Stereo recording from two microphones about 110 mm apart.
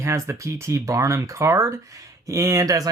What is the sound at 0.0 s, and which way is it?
Speech, 25° right (ahead or behind).